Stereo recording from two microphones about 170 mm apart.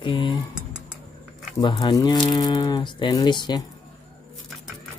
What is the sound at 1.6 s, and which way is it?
Speech, 25° left (ahead or behind).